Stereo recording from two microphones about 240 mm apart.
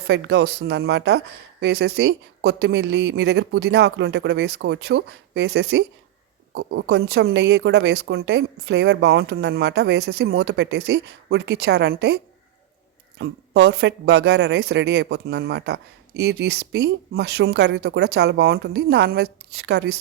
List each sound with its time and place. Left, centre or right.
0.1 s speech: right